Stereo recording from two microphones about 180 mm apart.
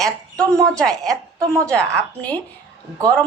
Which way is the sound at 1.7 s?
5° left (ahead or behind).